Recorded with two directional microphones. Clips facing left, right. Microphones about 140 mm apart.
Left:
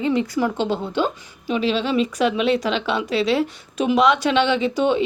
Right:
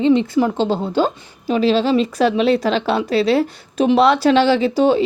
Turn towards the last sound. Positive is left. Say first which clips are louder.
# right 5 dB
turn(degrees=-35)  # may be behind; listen again after turning